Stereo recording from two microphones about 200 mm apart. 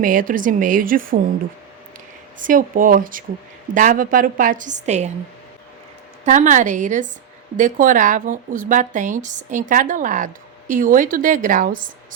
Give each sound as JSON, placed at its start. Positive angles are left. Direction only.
{"t": 0.0, "sound": "a woman's voice", "side_deg": -45}
{"t": 2.4, "sound": "a woman's voice", "side_deg": -40}
{"t": 6.2, "sound": "speech", "side_deg": -40}